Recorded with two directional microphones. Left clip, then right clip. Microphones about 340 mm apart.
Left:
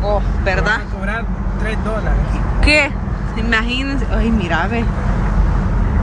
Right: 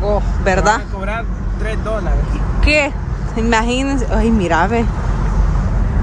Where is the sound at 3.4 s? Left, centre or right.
Centre.